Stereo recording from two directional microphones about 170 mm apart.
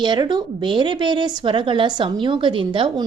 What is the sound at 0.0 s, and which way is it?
A woman's voice, 25° right (ahead or behind).